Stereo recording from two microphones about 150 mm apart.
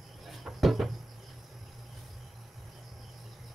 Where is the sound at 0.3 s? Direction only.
Centre (ahead or behind).